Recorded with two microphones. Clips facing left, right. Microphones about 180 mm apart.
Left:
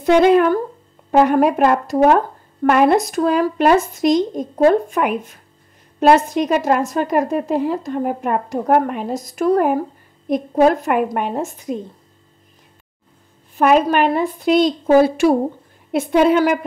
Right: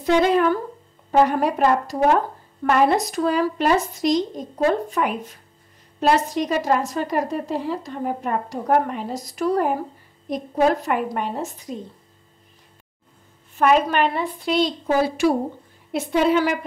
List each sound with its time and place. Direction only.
0.0 s a woman's voice: 60° left (ahead or behind)
13.7 s a woman's voice: 50° left (ahead or behind)